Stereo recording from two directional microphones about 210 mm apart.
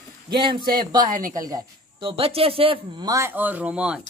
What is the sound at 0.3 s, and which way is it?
Speech, 20° right (ahead or behind).